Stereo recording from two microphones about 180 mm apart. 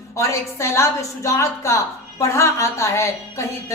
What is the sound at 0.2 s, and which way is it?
A woman's voice, 15° left (ahead or behind).